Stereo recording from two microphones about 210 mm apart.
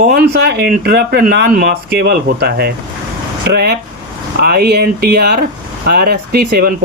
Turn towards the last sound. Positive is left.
turn(degrees=-45)  # may be behind; listen again after turning